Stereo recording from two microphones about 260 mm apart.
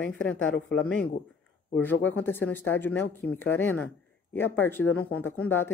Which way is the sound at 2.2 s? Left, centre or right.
Centre.